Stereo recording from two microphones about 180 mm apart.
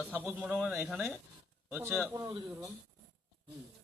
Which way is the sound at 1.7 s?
15° right (ahead or behind).